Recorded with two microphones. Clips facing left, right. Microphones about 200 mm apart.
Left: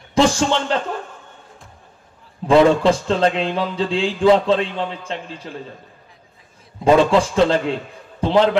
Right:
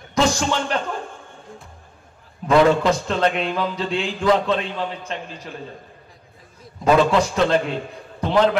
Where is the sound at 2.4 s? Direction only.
30° left (ahead or behind).